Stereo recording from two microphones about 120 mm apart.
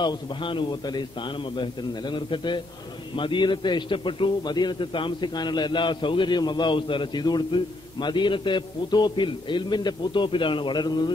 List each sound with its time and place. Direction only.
0.0 s a man's voice: 40° left (ahead or behind)